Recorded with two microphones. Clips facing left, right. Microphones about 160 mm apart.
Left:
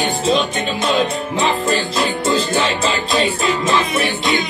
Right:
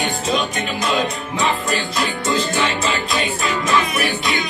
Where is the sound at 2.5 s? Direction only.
30° left (ahead or behind).